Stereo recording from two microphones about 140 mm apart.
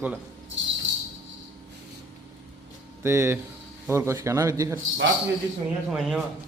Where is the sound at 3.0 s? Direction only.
20° right (ahead or behind).